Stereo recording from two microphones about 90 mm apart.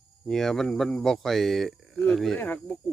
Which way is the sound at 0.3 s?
5° left (ahead or behind).